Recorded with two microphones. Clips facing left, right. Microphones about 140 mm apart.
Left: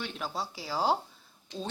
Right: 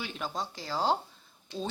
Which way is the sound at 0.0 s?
Centre (ahead or behind).